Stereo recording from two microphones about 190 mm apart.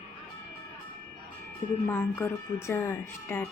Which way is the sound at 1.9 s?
10° left (ahead or behind).